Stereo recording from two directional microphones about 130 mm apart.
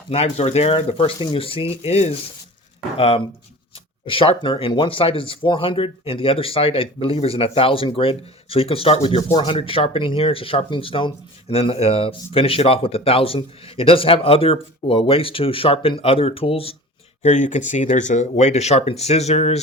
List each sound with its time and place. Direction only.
0.1 s speech: 50° left (ahead or behind)
17.2 s speech: 65° left (ahead or behind)